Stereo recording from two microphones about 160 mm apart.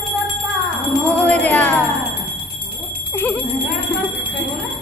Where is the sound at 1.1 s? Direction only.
10° left (ahead or behind).